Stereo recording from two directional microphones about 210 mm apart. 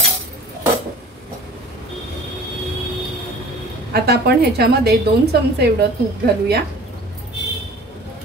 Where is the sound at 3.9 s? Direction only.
50° right (ahead or behind).